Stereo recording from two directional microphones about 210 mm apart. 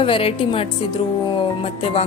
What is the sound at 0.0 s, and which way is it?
A woman's voice, 25° left (ahead or behind).